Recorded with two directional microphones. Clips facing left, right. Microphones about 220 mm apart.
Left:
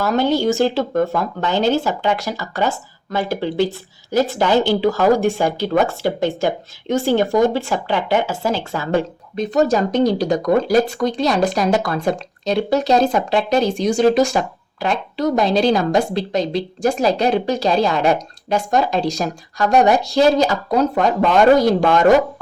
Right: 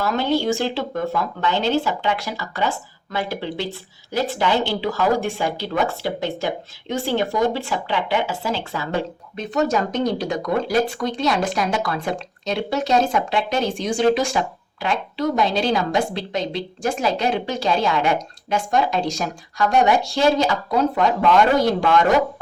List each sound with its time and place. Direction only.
0.0 s a woman's voice: 45° left (ahead or behind)